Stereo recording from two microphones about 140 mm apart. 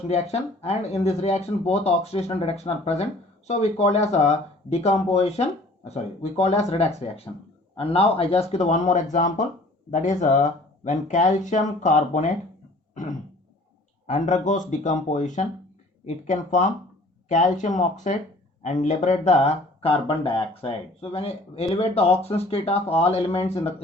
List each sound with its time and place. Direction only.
0.1 s speech: 50° left (ahead or behind)
12.9 s throat clearing: 65° left (ahead or behind)
14.1 s speech: 60° left (ahead or behind)
19.8 s speech: 40° left (ahead or behind)